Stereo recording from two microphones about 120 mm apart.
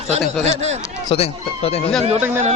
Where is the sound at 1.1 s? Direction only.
55° left (ahead or behind).